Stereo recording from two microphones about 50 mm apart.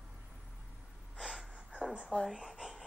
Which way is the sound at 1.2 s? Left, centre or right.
Centre.